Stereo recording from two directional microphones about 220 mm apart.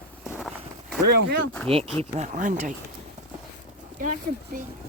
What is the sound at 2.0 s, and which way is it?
Speech, 30° right (ahead or behind).